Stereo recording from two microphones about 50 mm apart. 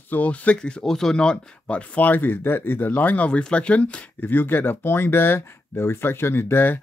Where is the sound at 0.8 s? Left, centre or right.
Centre; by 3.3 s left.